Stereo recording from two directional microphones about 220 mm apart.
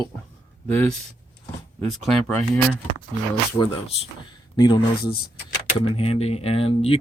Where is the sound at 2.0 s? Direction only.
5° left (ahead or behind).